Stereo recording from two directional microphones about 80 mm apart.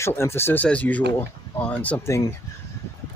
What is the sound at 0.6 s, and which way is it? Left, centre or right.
Speech, centre.